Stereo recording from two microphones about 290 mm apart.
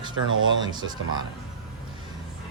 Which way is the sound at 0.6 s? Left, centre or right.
Centre.